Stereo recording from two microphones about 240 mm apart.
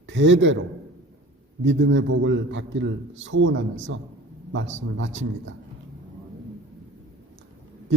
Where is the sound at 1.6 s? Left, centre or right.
Right.